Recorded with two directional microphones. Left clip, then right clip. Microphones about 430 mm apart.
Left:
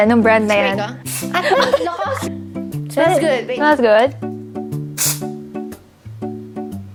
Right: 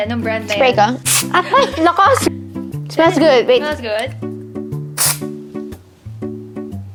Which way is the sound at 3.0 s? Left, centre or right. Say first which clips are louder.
Right 4 dB; right.